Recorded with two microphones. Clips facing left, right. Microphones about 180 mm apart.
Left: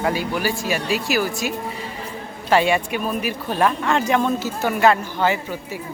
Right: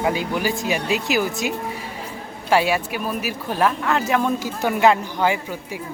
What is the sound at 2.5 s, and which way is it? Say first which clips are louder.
Speech: left 1 dB; 5° right (ahead or behind).